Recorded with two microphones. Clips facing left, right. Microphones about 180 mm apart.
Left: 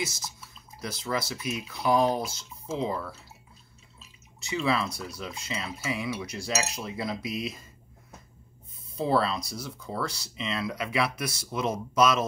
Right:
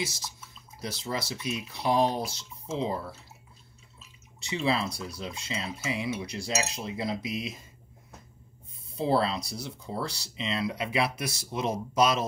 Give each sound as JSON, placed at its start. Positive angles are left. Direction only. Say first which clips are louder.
{"t": 0.7, "sound": "speech", "louder": "left 2 dB", "side_deg": -30}
{"t": 4.4, "sound": "speech", "louder": "left 1 dB", "side_deg": -30}
{"t": 6.6, "sound": "cutlery", "louder": "even", "side_deg": -30}
{"t": 8.9, "sound": "speech", "louder": "even", "side_deg": -30}